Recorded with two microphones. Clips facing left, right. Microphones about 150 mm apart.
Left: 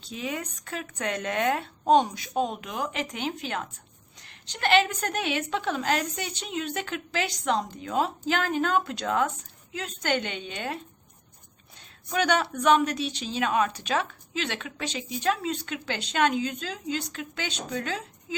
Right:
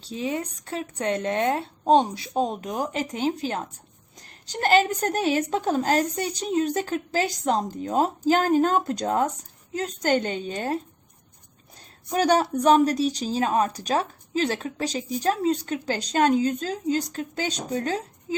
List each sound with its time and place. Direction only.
0.0 s a woman's voice: 30° right (ahead or behind)
11.8 s a woman's voice: 40° right (ahead or behind)